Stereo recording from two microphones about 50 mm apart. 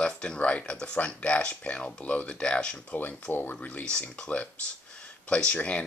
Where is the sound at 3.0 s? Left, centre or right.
Left.